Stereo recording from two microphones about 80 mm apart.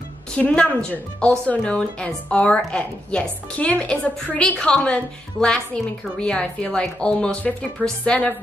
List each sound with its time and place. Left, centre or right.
0.4 s speech: centre